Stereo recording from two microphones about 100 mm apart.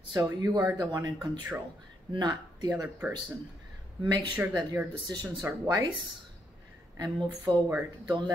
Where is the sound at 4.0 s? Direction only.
50° right (ahead or behind).